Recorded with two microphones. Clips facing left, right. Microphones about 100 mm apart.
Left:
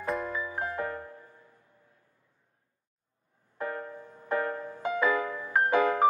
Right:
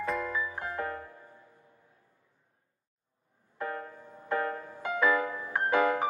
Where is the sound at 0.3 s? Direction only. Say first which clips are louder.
Left 1 dB; 25° left (ahead or behind).